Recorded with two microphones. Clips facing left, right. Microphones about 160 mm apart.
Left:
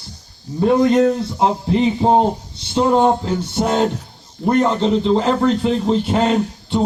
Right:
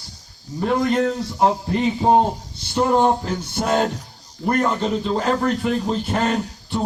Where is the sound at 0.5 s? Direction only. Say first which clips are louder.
Left 6 dB; 20° left (ahead or behind).